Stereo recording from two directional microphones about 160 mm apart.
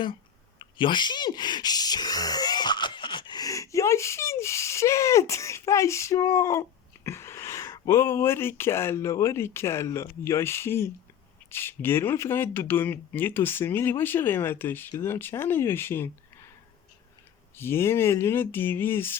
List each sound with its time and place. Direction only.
0.6 s speech: 30° left (ahead or behind)
17.6 s speech: 15° left (ahead or behind)